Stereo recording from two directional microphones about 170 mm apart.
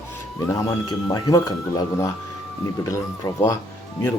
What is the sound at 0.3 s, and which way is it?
Speech, 20° left (ahead or behind).